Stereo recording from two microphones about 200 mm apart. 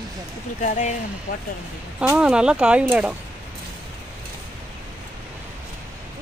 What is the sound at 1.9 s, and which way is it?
Speech, 5° right (ahead or behind).